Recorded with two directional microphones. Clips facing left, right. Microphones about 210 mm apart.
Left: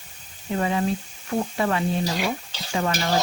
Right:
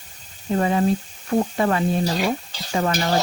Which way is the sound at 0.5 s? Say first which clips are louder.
Right 4 dB; 40° right (ahead or behind).